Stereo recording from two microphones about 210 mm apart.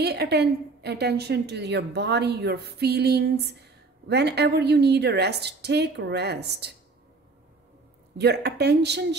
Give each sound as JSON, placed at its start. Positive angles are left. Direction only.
{"t": 0.0, "sound": "a woman's voice", "side_deg": -50}
{"t": 8.2, "sound": "a woman's voice", "side_deg": -50}